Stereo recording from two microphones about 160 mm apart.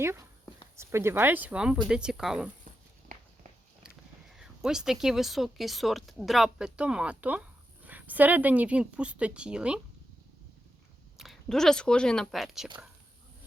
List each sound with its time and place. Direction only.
0.0 s a woman's voice: 15° right (ahead or behind)
4.4 s a woman's voice: 5° right (ahead or behind)
11.2 s speech: centre (ahead or behind)